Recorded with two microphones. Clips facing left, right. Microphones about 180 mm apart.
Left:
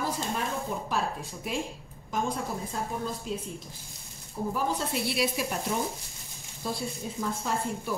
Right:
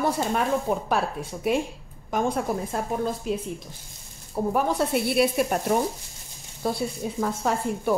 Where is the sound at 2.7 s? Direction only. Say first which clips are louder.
Right 6 dB; 65° right (ahead or behind).